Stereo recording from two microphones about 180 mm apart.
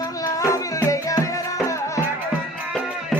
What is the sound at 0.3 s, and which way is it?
Music, 15° left (ahead or behind).